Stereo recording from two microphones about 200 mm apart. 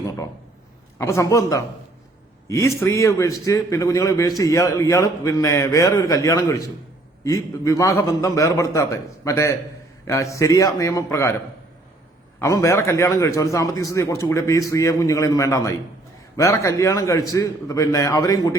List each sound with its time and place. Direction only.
0.9 s a man's voice: 15° left (ahead or behind)
12.4 s a man's voice: 15° left (ahead or behind)